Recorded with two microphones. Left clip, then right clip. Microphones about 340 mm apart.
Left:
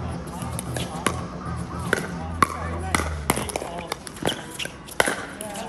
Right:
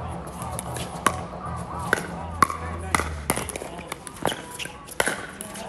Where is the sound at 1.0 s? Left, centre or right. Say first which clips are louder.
Right 5 dB; centre.